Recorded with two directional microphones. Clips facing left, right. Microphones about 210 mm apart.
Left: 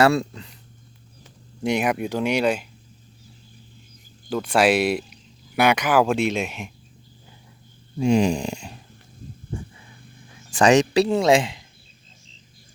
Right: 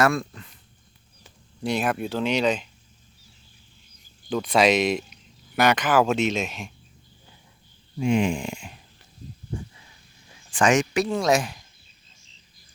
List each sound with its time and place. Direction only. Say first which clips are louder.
0.0 s speech: left 4 dB; 25° left (ahead or behind)
1.6 s speech: left 3 dB; 15° left (ahead or behind)
4.3 s speech: left 1 dB; 5° left (ahead or behind)
7.9 s speech: left 3 dB; 40° left (ahead or behind)
10.5 s speech: left 4 dB; 35° left (ahead or behind)